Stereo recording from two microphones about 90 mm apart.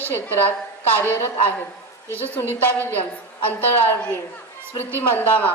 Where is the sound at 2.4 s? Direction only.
25° left (ahead or behind).